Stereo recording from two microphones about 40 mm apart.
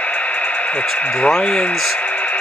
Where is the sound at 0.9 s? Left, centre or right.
Left.